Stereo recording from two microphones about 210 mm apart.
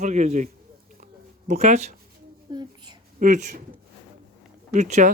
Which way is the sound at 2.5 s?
20° right (ahead or behind).